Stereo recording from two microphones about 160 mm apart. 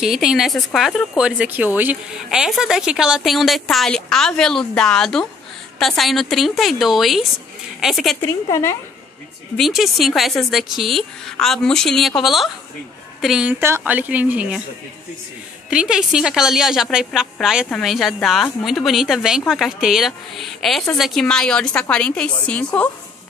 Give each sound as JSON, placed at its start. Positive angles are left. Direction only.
{"t": 0.0, "sound": "speech", "side_deg": -5}
{"t": 8.2, "sound": "a woman's voice", "side_deg": 15}
{"t": 9.6, "sound": "a woman's voice", "side_deg": 0}
{"t": 15.7, "sound": "speech", "side_deg": -5}